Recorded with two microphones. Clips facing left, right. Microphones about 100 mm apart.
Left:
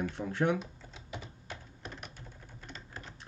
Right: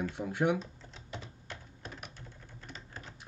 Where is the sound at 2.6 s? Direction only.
5° right (ahead or behind).